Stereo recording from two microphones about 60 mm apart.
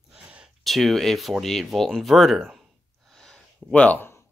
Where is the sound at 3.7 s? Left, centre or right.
Left.